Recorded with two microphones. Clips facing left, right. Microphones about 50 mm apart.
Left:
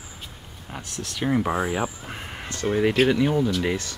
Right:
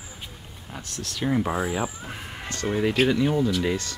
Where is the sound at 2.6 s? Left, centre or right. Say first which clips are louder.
Left 2 dB; centre.